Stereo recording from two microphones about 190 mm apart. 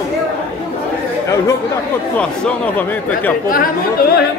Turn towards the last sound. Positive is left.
turn(degrees=50)  # may be behind; listen again after turning